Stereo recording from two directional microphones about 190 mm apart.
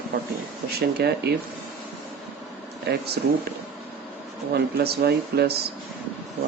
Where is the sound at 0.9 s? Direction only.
60° right (ahead or behind).